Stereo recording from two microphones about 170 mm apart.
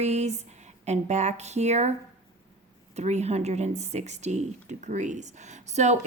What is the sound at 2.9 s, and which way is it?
Speech, 40° right (ahead or behind).